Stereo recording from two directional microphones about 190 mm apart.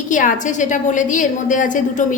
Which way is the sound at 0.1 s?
45° left (ahead or behind).